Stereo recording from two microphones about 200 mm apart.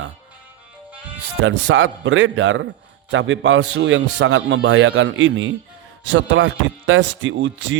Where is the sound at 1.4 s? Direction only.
70° right (ahead or behind).